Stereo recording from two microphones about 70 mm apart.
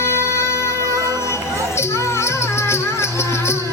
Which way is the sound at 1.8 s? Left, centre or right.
Left.